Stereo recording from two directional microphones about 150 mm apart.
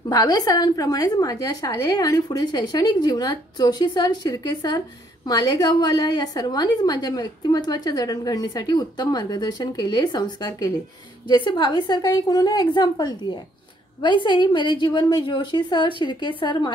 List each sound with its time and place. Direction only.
0.1 s a woman's voice: 25° left (ahead or behind)